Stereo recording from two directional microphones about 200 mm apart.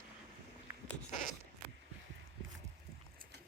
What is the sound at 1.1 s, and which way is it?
Zipper, 35° left (ahead or behind).